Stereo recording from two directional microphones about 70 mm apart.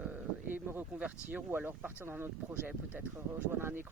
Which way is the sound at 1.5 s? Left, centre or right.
Right.